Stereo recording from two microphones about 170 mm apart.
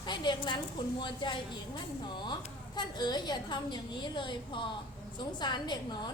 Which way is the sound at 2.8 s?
25° left (ahead or behind).